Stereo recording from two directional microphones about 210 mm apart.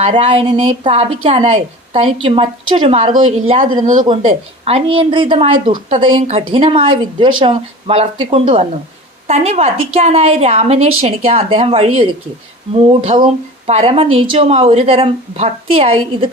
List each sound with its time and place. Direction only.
0.0 s a woman's voice: 25° right (ahead or behind)